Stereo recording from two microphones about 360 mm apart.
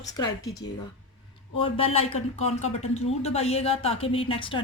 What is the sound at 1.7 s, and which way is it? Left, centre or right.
Speech, centre.